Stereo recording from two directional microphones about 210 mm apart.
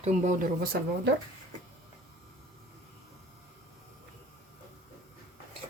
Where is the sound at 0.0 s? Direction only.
35° right (ahead or behind).